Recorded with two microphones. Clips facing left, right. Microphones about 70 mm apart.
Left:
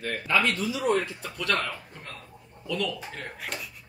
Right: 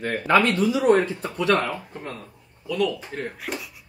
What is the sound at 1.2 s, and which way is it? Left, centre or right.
Speech, right.